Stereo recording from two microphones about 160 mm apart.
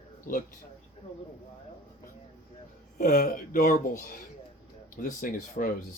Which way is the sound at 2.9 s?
65° left (ahead or behind).